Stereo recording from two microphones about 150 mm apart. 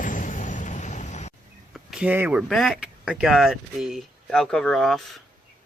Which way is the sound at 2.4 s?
Centre (ahead or behind).